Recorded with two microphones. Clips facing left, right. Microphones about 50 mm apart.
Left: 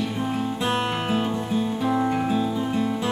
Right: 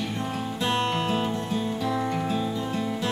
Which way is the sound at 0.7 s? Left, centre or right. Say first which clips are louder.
Right 1 dB; centre.